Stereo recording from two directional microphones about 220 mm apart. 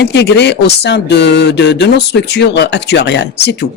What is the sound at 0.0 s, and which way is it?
Speech, 50° left (ahead or behind).